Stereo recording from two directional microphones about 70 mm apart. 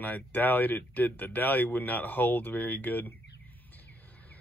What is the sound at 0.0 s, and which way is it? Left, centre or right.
Speech, left.